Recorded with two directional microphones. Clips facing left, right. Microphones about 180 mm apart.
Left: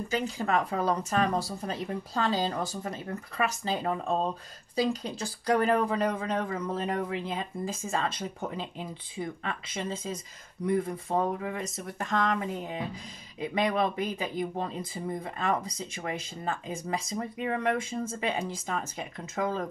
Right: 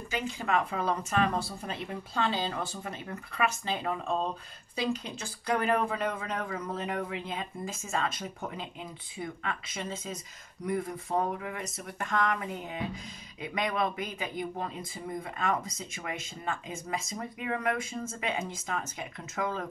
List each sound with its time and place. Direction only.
0.1 s speech: 40° left (ahead or behind)